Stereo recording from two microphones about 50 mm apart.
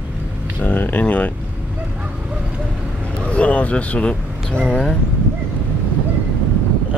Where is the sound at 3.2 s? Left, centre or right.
Left.